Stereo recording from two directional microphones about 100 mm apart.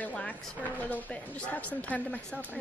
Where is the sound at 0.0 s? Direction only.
15° left (ahead or behind).